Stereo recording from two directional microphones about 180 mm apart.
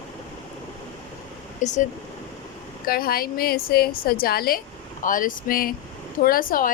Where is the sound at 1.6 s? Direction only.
45° left (ahead or behind).